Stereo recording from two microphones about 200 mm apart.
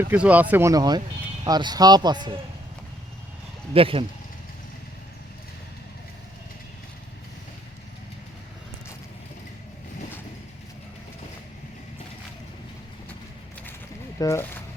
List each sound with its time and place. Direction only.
0.0 s speech: 10° right (ahead or behind)
3.8 s speech: 25° right (ahead or behind)
14.2 s speech: 15° left (ahead or behind)